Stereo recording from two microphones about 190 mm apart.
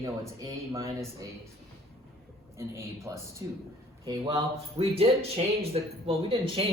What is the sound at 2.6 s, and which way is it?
Speech, 15° right (ahead or behind).